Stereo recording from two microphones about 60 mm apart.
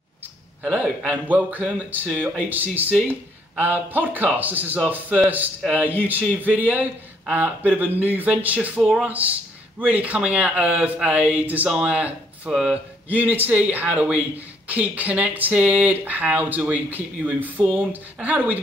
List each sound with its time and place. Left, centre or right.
0.6 s speech: right